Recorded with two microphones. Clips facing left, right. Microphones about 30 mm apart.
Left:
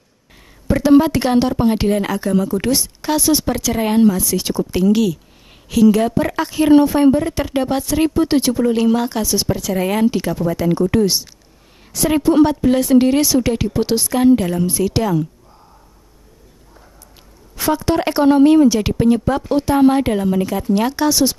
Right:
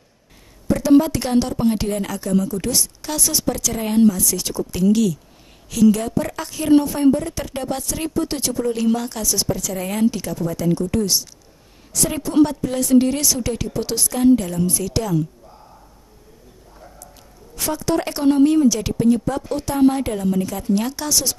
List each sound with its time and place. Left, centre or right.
0.7 s a woman's voice: left
17.6 s speech: left